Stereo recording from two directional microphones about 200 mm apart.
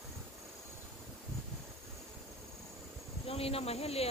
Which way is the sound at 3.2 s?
30° left (ahead or behind).